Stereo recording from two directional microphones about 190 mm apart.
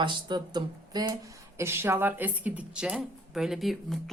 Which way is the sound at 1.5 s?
10° right (ahead or behind).